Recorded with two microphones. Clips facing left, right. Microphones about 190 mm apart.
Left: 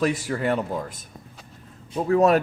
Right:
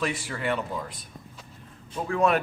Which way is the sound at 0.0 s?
40° left (ahead or behind).